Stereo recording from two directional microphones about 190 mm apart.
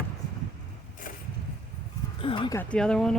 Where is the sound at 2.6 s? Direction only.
5° left (ahead or behind).